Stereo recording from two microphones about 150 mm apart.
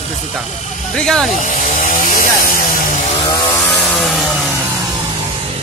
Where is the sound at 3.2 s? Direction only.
25° left (ahead or behind).